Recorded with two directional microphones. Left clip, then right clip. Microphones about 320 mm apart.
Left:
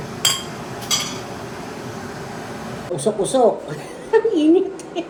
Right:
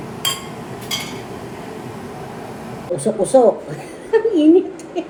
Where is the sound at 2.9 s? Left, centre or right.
Centre.